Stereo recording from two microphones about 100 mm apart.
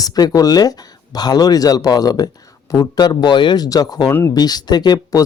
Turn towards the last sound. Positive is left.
turn(degrees=45)  # may be behind; listen again after turning